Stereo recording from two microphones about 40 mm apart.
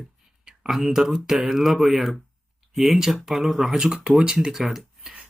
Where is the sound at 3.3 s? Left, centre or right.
Centre.